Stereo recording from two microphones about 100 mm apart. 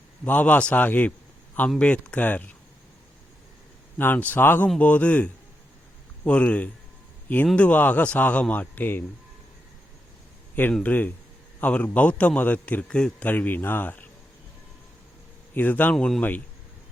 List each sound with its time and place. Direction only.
0.3 s a man's voice: 15° left (ahead or behind)
3.9 s a man's voice: 20° left (ahead or behind)
10.5 s a man's voice: 20° left (ahead or behind)
15.5 s a man's voice: 15° left (ahead or behind)